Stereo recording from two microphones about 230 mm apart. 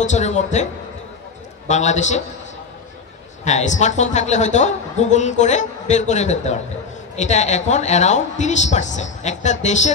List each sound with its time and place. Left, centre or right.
0.0 s a woman's voice: left
1.7 s a woman's voice: left
3.4 s a woman's voice: left